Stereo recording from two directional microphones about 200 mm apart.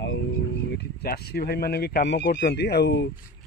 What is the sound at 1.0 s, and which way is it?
Speech, 50° left (ahead or behind).